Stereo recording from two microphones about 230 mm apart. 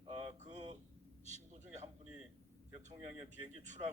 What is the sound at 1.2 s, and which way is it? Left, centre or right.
Speech, right.